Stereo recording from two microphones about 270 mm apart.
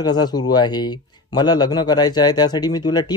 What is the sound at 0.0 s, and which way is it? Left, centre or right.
A man's voice, centre.